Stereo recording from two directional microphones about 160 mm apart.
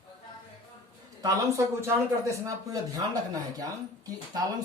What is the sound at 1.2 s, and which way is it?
Speech, 15° right (ahead or behind).